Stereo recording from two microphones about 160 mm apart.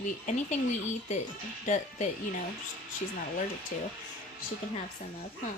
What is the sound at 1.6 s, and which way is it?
Speech, 45° left (ahead or behind).